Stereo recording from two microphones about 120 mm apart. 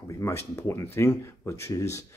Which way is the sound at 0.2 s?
20° left (ahead or behind).